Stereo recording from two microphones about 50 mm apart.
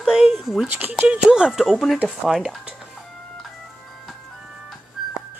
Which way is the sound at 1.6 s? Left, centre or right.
Centre.